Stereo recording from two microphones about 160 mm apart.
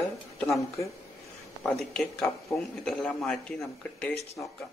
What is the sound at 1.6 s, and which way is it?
A man's voice, 5° left (ahead or behind).